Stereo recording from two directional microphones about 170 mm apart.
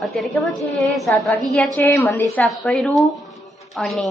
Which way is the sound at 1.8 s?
15° left (ahead or behind).